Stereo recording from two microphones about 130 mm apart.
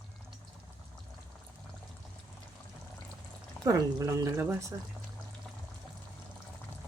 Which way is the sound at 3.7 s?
25° right (ahead or behind).